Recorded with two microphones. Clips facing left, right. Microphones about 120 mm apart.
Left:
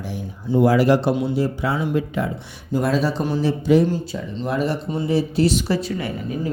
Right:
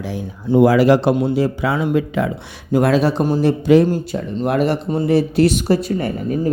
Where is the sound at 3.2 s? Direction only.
50° right (ahead or behind); by 3.8 s 65° right (ahead or behind).